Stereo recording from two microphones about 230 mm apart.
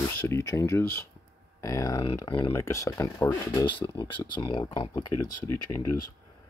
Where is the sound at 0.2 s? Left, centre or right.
Centre.